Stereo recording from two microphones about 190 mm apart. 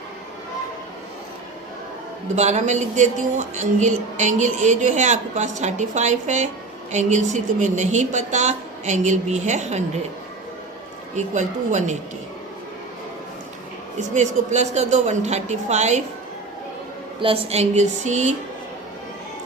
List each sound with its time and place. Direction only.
2.3 s speech: 35° right (ahead or behind)
11.3 s speech: 40° right (ahead or behind)
14.1 s speech: 40° right (ahead or behind)
17.2 s speech: 30° right (ahead or behind)